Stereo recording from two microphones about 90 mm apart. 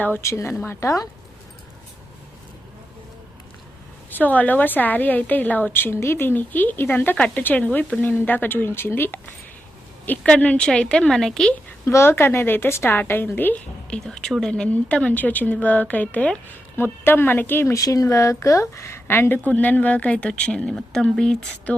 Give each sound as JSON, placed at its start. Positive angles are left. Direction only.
{"t": 0.0, "sound": "a woman's voice", "side_deg": 20}
{"t": 0.3, "sound": "a woman's voice", "side_deg": 35}
{"t": 4.1, "sound": "a woman's voice", "side_deg": 20}
{"t": 11.9, "sound": "a woman's voice", "side_deg": 30}
{"t": 13.9, "sound": "a woman's voice", "side_deg": 5}
{"t": 17.7, "sound": "a woman's voice", "side_deg": 40}